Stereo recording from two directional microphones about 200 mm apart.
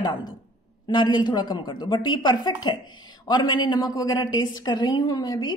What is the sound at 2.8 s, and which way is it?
Speech, 90° left.